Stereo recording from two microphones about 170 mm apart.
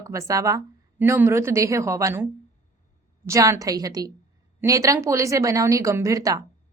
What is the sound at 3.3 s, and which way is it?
A woman's voice, 20° right (ahead or behind).